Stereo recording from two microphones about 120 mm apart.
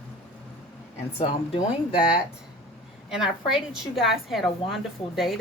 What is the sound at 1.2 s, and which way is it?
Speech, 55° left (ahead or behind).